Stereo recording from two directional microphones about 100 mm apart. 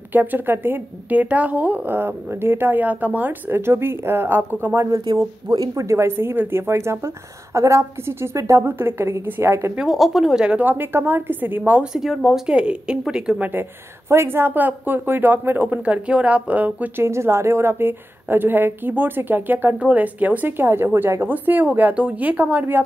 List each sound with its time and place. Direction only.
0.1 s speech: 20° right (ahead or behind)
5.0 s speech: 40° right (ahead or behind); by 9.8 s 25° right (ahead or behind)
9.8 s a woman's voice: centre (ahead or behind); by 11.9 s 15° right (ahead or behind)
11.9 s a woman's voice: 5° right (ahead or behind)
13.4 s speech: 20° right (ahead or behind)